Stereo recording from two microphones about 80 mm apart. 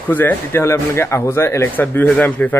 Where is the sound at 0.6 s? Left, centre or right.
Left.